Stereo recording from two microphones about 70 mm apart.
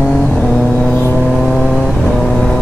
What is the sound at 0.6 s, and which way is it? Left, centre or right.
Vehicle, centre.